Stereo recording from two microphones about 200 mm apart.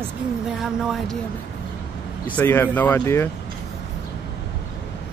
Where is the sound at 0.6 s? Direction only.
Centre (ahead or behind).